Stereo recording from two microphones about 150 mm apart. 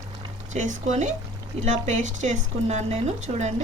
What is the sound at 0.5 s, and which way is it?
Speech, 50° right (ahead or behind).